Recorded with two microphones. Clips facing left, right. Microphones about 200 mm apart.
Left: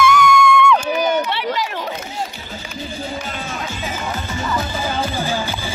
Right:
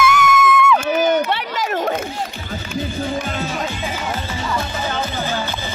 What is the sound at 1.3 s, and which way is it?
Run, 45° right (ahead or behind).